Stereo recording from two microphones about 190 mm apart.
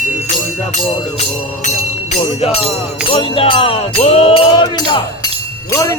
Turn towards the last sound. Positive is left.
turn(degrees=15)  # may be behind; listen again after turning